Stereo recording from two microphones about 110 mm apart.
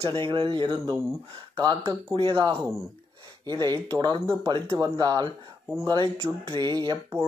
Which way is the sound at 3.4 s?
40° right (ahead or behind).